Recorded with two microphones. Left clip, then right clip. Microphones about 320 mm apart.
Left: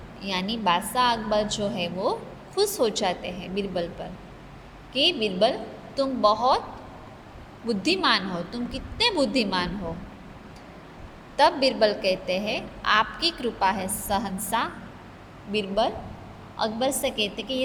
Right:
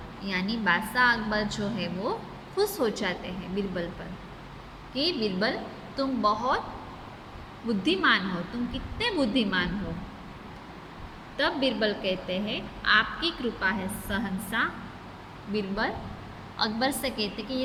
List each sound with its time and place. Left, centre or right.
0.2 s a woman's voice: centre
4.9 s a woman's voice: centre
7.7 s a woman's voice: centre
11.3 s a woman's voice: centre